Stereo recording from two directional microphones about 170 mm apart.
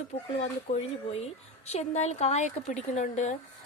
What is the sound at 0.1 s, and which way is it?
A woman's voice, 40° left (ahead or behind).